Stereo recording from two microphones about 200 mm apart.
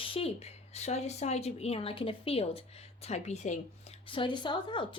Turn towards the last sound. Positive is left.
turn(degrees=25)  # may be behind; listen again after turning